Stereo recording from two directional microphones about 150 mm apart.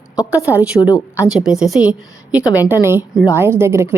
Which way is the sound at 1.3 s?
5° right (ahead or behind).